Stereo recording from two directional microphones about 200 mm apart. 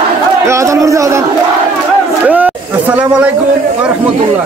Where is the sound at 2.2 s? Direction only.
10° right (ahead or behind).